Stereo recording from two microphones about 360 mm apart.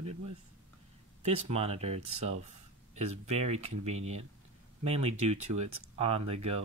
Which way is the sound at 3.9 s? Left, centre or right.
Right.